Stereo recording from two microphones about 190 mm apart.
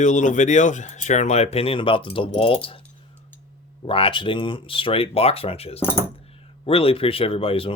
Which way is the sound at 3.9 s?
30° left (ahead or behind).